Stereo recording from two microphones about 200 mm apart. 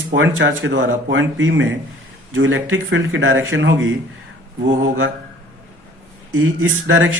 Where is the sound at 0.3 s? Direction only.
75° right (ahead or behind).